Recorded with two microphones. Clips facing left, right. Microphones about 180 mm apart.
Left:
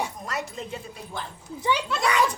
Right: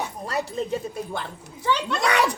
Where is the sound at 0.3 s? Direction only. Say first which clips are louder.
Right 6 dB; 30° right (ahead or behind).